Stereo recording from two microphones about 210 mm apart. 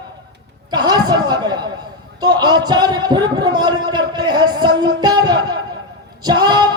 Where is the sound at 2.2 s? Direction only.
20° right (ahead or behind).